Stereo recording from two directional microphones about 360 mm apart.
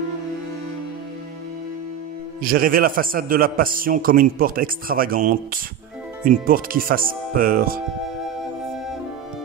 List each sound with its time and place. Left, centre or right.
2.4 s a man's voice: right